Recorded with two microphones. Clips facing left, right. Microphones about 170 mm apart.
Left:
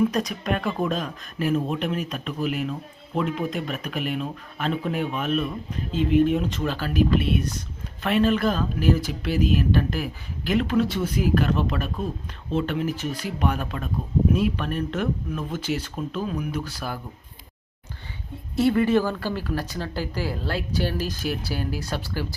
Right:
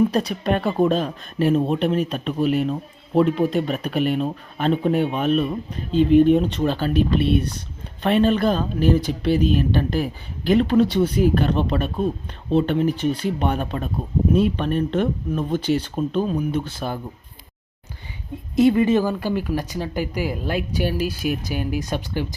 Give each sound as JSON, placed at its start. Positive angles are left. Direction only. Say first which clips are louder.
{"t": 0.1, "sound": "speech", "louder": "right 4 dB", "side_deg": -30}
{"t": 5.9, "sound": "speech", "louder": "right 7 dB", "side_deg": 5}
{"t": 6.1, "sound": "speech", "louder": "right 5 dB", "side_deg": -35}
{"t": 18.5, "sound": "speech", "louder": "right 4 dB", "side_deg": -15}